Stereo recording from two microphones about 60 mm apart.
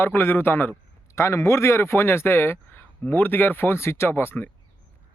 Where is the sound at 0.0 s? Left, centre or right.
Left.